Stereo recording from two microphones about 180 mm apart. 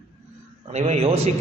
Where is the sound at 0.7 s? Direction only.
40° right (ahead or behind).